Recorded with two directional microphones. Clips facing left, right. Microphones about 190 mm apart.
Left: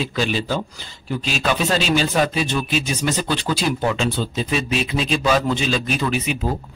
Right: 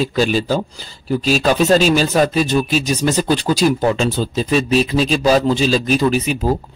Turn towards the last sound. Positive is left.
turn(degrees=-40)  # may be behind; listen again after turning